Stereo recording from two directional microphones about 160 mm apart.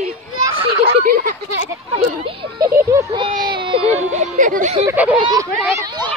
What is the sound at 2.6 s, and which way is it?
Speech, 15° right (ahead or behind).